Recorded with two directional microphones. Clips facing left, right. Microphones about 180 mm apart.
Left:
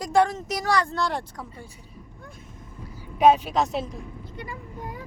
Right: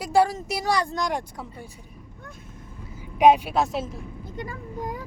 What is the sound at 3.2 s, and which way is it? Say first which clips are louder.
Speech: right 1 dB; 10° right (ahead or behind).